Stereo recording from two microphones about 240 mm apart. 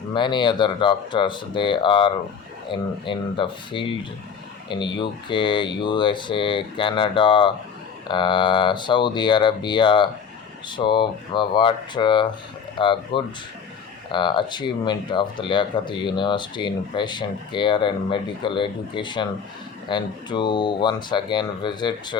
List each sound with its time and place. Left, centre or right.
0.1 s speech: centre